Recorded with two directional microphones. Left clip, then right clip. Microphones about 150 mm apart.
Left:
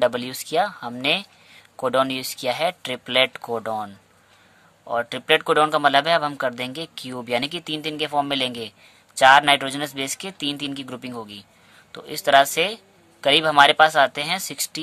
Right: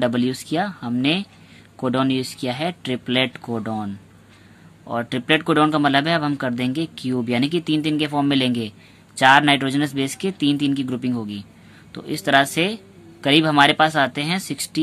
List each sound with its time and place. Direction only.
0.0 s speech: 40° left (ahead or behind)
4.8 s speech: 30° left (ahead or behind)